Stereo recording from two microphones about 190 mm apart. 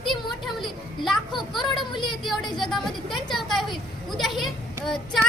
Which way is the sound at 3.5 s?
Centre (ahead or behind).